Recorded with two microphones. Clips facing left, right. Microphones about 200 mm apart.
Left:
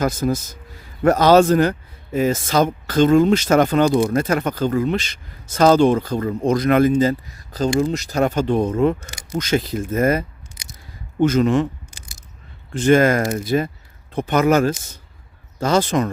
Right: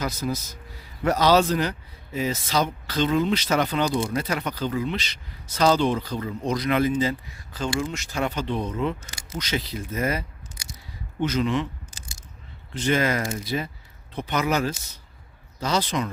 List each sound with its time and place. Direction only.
0.0 s speech: 50° left (ahead or behind)
12.7 s speech: 50° left (ahead or behind)